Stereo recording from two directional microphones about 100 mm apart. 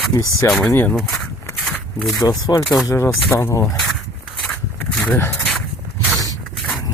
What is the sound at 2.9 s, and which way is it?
Speech, 25° left (ahead or behind).